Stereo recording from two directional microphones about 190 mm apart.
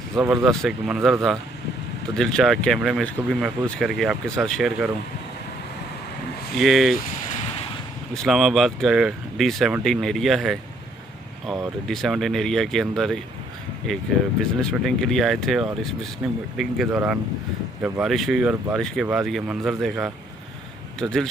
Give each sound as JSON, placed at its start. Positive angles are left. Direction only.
{"t": 0.2, "sound": "speech", "side_deg": 0}
{"t": 6.6, "sound": "speech", "side_deg": 0}
{"t": 8.1, "sound": "speech", "side_deg": 0}
{"t": 14.6, "sound": "speech", "side_deg": 0}